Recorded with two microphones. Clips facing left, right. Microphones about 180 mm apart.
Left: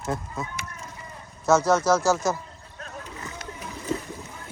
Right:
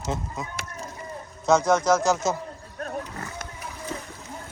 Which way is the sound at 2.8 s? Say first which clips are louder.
Right 6 dB; 55° right (ahead or behind).